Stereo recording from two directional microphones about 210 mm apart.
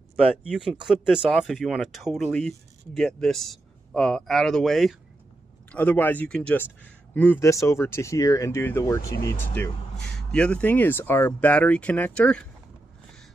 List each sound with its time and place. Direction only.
0.7 s a man's voice: centre (ahead or behind)